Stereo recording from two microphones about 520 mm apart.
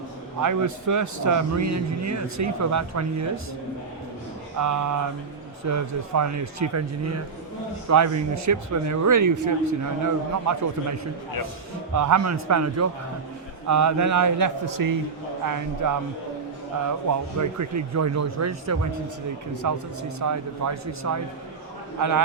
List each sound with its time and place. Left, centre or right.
0.4 s speech: right
4.6 s a man's voice: right
17.4 s speech: right